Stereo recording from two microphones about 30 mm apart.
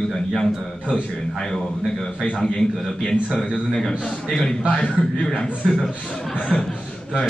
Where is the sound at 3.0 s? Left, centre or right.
Left.